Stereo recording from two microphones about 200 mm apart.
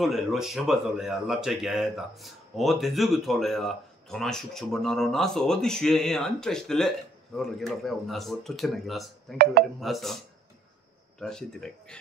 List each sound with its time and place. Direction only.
0.0 s speech: centre (ahead or behind)
9.4 s speech: 50° right (ahead or behind)
9.8 s speech: centre (ahead or behind)
11.1 s speech: 5° left (ahead or behind)